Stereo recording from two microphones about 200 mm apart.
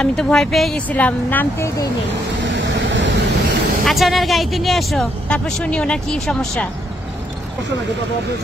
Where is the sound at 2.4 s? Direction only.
65° right (ahead or behind).